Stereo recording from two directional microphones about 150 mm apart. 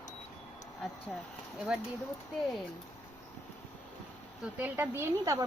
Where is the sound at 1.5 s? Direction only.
5° right (ahead or behind).